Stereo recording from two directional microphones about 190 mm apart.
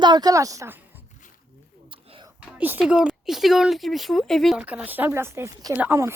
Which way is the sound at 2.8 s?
5° right (ahead or behind).